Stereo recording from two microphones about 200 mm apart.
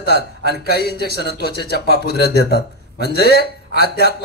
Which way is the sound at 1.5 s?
55° right (ahead or behind).